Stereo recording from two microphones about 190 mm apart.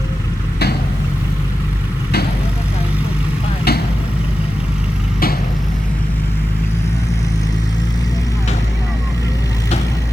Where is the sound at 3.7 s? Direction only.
55° left (ahead or behind).